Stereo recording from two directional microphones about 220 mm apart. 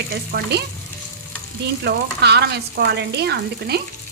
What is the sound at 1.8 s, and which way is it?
Frying, 50° right (ahead or behind).